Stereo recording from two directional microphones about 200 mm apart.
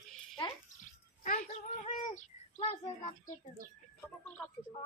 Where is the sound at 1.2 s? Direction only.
40° left (ahead or behind).